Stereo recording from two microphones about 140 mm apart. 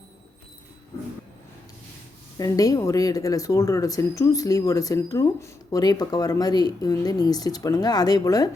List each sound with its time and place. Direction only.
2.4 s speech: 25° left (ahead or behind)